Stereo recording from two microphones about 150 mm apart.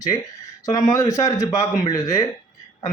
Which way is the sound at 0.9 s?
20° left (ahead or behind).